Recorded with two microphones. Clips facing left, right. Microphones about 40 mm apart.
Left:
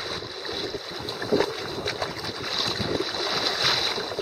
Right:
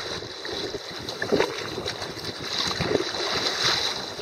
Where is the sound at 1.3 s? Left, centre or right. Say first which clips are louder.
Even; right.